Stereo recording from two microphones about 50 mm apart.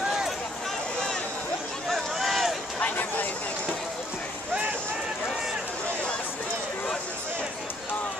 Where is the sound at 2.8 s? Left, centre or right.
Left.